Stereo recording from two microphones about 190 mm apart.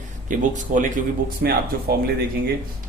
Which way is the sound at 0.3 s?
40° right (ahead or behind).